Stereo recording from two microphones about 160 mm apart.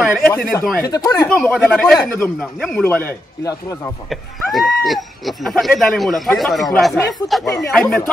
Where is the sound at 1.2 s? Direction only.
5° left (ahead or behind); by 3.9 s 20° left (ahead or behind).